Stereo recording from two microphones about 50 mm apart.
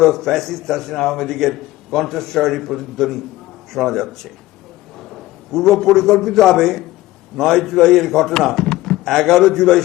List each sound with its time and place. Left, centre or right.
0.0 s a man's voice: centre